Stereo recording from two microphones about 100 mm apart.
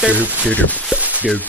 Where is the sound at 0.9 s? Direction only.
15° right (ahead or behind).